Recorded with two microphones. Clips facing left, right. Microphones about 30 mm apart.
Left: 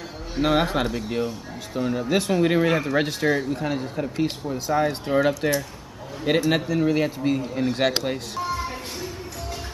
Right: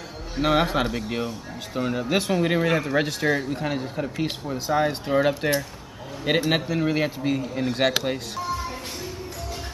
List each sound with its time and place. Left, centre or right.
0.4 s speech: centre
5.0 s speech: centre
8.5 s music: centre